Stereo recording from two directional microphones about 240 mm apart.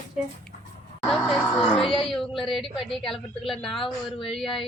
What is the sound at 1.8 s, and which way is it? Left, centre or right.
Speech, left.